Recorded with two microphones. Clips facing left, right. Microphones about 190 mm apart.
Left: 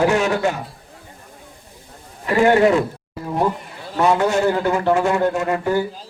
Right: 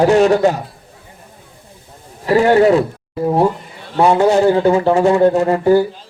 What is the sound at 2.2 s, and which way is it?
Speech, 35° right (ahead or behind).